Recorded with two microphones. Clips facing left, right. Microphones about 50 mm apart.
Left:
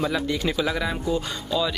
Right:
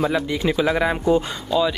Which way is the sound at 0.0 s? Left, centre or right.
Centre.